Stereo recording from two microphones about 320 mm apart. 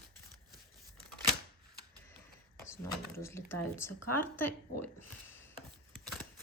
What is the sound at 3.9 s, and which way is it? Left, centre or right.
Speech, left.